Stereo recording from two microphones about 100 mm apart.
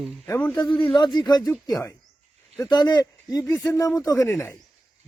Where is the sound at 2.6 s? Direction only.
40° left (ahead or behind).